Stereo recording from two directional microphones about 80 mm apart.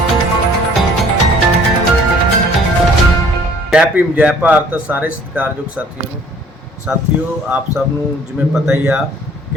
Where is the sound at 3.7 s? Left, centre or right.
Centre.